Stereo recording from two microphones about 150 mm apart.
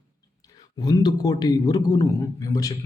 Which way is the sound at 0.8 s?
25° left (ahead or behind).